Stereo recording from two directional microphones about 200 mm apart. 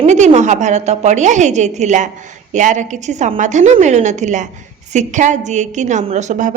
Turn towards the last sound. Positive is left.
turn(degrees=-40)  # may be behind; listen again after turning